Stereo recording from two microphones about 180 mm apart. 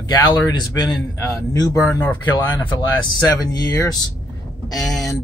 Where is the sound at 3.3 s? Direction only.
20° left (ahead or behind).